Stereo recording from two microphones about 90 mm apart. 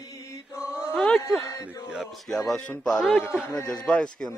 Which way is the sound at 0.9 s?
5° left (ahead or behind).